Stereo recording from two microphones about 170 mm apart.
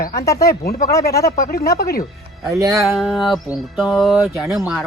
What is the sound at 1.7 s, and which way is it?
Speech, 65° left (ahead or behind).